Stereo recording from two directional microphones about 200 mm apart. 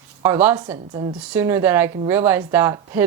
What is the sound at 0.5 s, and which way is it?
Speech, 25° right (ahead or behind).